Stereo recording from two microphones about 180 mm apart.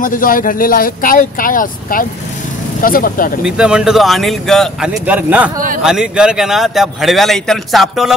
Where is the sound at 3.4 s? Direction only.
5° right (ahead or behind).